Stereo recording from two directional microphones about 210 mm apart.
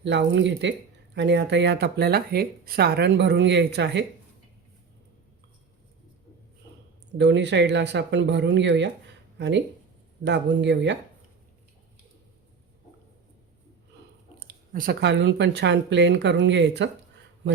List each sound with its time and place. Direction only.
0.0 s speech: 55° right (ahead or behind)
7.2 s speech: 55° right (ahead or behind)
14.3 s speech: 40° right (ahead or behind)